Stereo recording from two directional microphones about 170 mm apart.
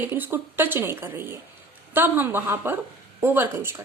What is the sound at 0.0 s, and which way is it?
A woman's voice, 10° right (ahead or behind).